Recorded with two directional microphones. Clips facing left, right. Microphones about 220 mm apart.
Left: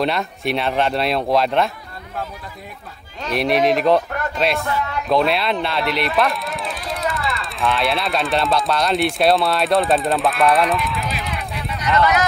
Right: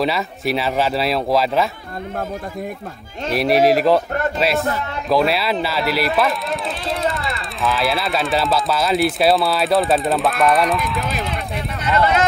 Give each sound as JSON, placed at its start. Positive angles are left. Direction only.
{"t": 0.0, "sound": "speech", "side_deg": -5}
{"t": 3.3, "sound": "speech", "side_deg": -5}
{"t": 6.9, "sound": "a sound", "side_deg": -30}
{"t": 7.2, "sound": "speech", "side_deg": 0}
{"t": 11.8, "sound": "speech", "side_deg": -25}